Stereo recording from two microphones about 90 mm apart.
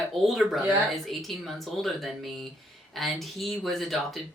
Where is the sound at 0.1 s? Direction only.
Centre (ahead or behind).